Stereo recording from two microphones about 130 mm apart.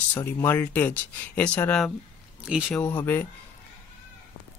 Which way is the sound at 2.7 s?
15° left (ahead or behind).